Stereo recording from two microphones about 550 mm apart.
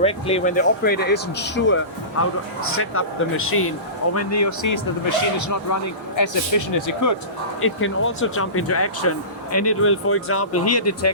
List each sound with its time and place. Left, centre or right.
0.0 s speech: centre; by 7.2 s left
7.6 s speech: left